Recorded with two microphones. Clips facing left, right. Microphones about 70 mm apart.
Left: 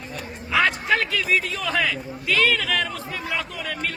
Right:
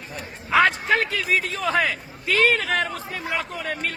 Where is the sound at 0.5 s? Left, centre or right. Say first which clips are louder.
Right 2 dB; right.